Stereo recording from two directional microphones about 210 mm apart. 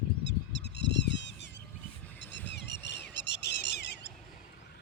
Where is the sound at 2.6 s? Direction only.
55° left (ahead or behind).